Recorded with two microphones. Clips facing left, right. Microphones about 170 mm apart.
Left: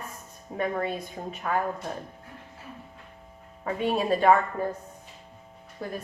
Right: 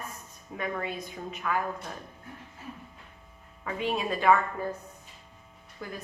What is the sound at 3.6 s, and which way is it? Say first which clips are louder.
Speech: left 4 dB; 35° left (ahead or behind).